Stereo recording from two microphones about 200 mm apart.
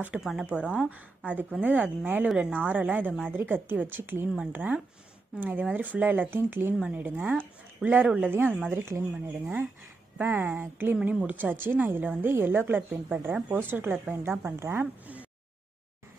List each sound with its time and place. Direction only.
0.0 s speech: 5° right (ahead or behind)